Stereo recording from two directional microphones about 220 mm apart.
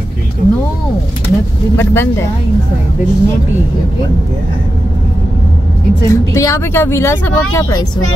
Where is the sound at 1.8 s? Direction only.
10° left (ahead or behind).